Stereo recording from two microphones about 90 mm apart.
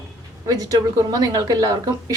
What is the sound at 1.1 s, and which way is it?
A woman's voice, 45° right (ahead or behind).